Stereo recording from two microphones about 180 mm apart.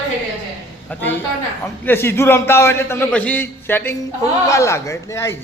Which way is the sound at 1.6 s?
10° left (ahead or behind).